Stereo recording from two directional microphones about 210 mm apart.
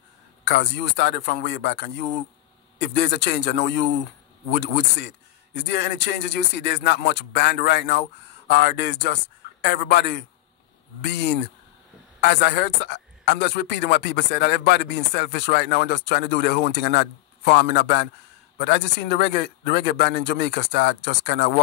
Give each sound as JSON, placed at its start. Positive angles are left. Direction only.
{"t": 0.5, "sound": "a man's voice", "side_deg": 55}